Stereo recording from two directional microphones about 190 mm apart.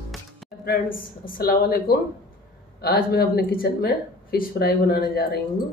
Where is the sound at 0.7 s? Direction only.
50° left (ahead or behind).